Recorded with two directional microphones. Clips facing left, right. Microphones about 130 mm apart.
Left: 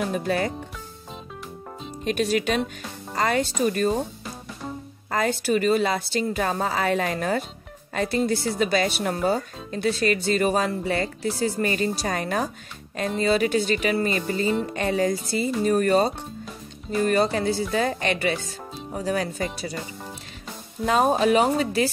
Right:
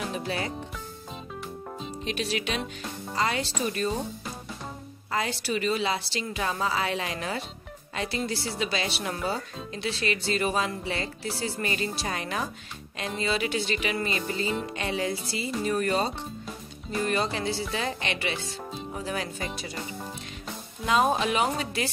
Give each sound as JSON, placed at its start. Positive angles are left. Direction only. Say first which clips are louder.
{"t": 0.1, "sound": "speech", "louder": "left 7 dB", "side_deg": 50}
{"t": 2.0, "sound": "speech", "louder": "left 8 dB", "side_deg": 50}
{"t": 5.1, "sound": "speech", "louder": "left 6 dB", "side_deg": 50}
{"t": 20.8, "sound": "speech", "louder": "left 4 dB", "side_deg": 40}